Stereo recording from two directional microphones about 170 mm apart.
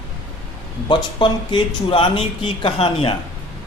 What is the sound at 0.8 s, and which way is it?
Speech, 30° left (ahead or behind).